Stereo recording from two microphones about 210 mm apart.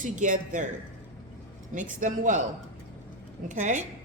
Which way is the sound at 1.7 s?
35° right (ahead or behind).